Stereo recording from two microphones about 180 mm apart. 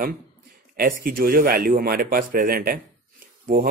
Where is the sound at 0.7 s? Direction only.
55° right (ahead or behind).